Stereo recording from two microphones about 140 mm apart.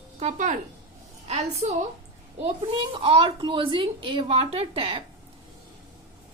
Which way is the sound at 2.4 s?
35° right (ahead or behind).